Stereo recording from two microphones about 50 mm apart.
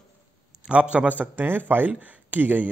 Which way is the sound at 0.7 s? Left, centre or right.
Right.